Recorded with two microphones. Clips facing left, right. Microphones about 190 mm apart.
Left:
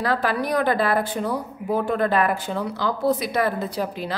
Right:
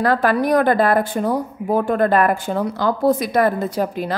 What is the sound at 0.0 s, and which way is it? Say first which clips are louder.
Speech: right 6 dB; 50° right (ahead or behind).